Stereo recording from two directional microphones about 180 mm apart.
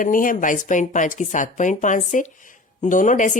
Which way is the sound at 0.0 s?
50° left (ahead or behind).